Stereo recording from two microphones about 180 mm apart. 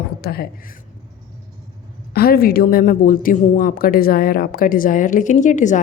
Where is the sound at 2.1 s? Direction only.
55° left (ahead or behind).